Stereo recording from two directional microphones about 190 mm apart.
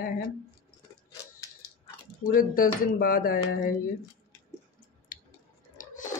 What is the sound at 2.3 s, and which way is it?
Speech, 50° left (ahead or behind).